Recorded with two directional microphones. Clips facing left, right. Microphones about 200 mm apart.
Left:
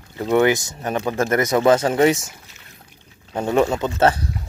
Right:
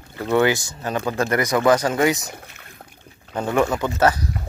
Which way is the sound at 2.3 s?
55° right (ahead or behind).